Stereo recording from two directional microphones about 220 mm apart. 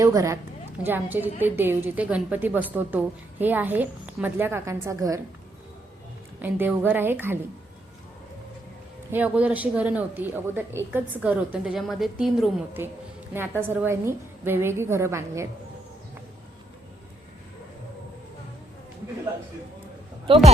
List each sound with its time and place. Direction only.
0.0 s a woman's voice: 15° right (ahead or behind)
6.4 s a woman's voice: 10° right (ahead or behind)
9.1 s a woman's voice: 5° right (ahead or behind)
20.2 s speech: 25° right (ahead or behind)